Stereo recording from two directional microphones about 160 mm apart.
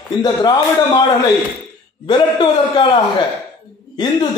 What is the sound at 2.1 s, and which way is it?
A man's voice, 30° left (ahead or behind).